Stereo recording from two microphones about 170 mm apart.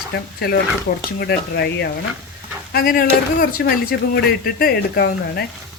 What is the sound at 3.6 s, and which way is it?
Speech, 75° left (ahead or behind).